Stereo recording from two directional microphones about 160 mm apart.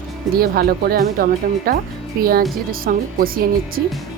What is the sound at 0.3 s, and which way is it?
Speech, 70° right (ahead or behind).